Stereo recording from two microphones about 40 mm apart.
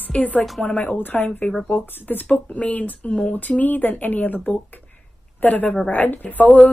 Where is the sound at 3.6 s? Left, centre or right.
Left.